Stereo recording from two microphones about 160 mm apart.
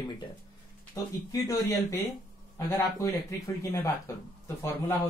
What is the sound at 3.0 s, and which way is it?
Speech, 20° left (ahead or behind).